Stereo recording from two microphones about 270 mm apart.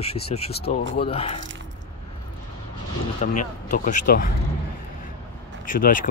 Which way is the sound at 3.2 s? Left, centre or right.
Left.